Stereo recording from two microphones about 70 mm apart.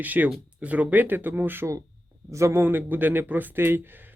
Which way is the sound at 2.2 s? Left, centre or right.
Right.